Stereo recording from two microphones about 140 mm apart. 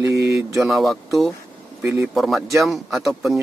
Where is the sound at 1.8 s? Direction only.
15° right (ahead or behind).